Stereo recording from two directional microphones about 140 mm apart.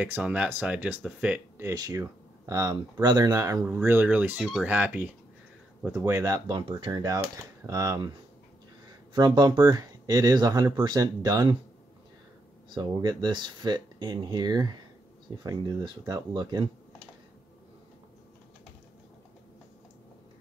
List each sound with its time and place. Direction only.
0.0 s speech: 10° right (ahead or behind)
1.7 s speech: 25° right (ahead or behind)
3.6 s speech: 15° right (ahead or behind)
5.9 s speech: 20° right (ahead or behind)
9.1 s speech: 30° right (ahead or behind)
12.6 s speech: 35° right (ahead or behind)